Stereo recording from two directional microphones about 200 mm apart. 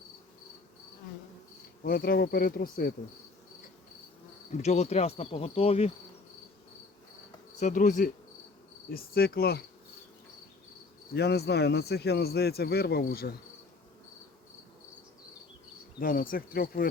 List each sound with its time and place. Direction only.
1.8 s speech: 50° left (ahead or behind)
4.5 s speech: 35° left (ahead or behind)
7.6 s speech: 40° left (ahead or behind)
11.1 s speech: 55° left (ahead or behind)
16.0 s speech: 45° left (ahead or behind)